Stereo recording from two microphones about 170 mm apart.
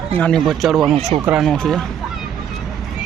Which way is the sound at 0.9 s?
40° right (ahead or behind).